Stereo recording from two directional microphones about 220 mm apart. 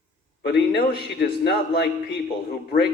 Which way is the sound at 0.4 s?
50° left (ahead or behind).